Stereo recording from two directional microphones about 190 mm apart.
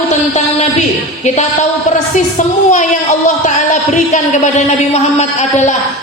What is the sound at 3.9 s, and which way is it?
A woman's voice, 40° left (ahead or behind).